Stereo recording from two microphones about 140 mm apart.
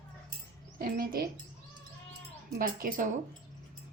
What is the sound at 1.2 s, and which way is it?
Speech, 90° right.